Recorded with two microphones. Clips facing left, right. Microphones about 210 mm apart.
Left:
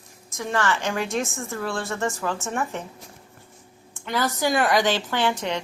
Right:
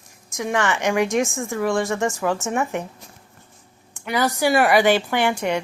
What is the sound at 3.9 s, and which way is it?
A woman's voice, 15° right (ahead or behind).